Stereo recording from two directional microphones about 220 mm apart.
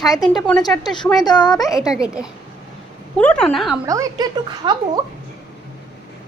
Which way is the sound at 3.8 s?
15° right (ahead or behind).